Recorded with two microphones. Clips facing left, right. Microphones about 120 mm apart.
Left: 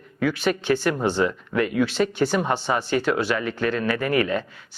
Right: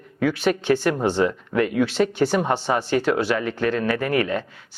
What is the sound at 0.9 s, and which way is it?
Speech, 30° right (ahead or behind).